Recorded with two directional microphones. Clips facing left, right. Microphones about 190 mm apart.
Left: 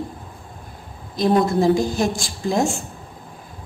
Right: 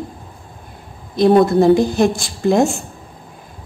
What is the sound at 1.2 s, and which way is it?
A woman's voice, 60° right (ahead or behind).